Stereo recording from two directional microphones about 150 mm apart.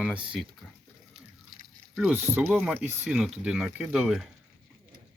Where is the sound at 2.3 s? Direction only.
5° right (ahead or behind).